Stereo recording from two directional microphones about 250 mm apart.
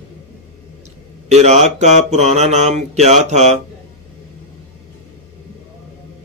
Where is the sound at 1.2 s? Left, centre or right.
Right.